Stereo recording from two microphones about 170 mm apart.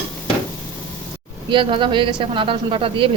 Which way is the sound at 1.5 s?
30° right (ahead or behind).